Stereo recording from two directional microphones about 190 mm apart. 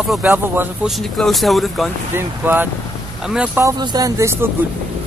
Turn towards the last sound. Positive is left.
turn(degrees=-15)  # may be behind; listen again after turning